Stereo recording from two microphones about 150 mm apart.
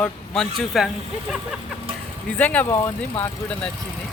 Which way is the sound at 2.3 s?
10° left (ahead or behind).